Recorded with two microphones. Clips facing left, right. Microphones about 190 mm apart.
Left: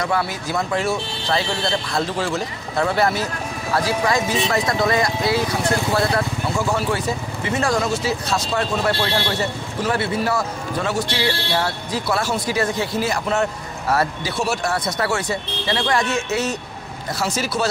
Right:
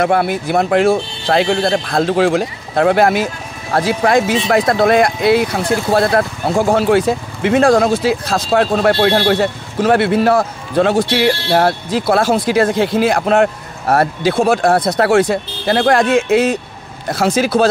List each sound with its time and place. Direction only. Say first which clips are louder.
0.0 s a man's voice: right 8 dB; 60° right (ahead or behind)
1.6 s a man's voice: right 7 dB; 50° right (ahead or behind)
2.1 s speech: right 10 dB; 75° right (ahead or behind)
3.7 s a man's voice: right 7 dB; 60° right (ahead or behind)
5.9 s a man's voice: right 6 dB; 55° right (ahead or behind)
6.7 s speech: right 9 dB; 85° right
7.6 s speech: right 8 dB; 60° right (ahead or behind); by 8.2 s 90° right
8.5 s speech: right 10 dB; 80° right
9.3 s a man's voice: right 8 dB; 80° right
17.5 s a man's voice: right 9 dB; 55° right (ahead or behind)